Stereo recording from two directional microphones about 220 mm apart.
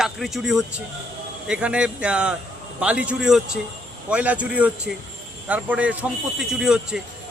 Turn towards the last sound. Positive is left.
turn(degrees=-5)  # may be behind; listen again after turning